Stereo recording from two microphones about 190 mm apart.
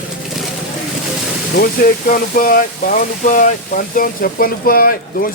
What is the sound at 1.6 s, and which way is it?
Speech, 45° left (ahead or behind).